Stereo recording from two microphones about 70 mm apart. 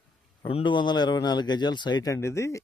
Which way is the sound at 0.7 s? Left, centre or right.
Left.